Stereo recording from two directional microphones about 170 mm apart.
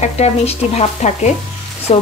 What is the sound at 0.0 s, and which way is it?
Speech, 40° left (ahead or behind).